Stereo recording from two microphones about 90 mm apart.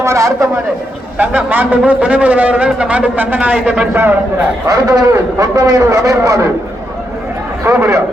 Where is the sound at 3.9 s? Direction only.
25° right (ahead or behind).